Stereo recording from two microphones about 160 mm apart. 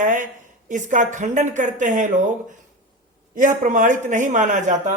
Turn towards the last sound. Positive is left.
turn(degrees=-50)  # may be behind; listen again after turning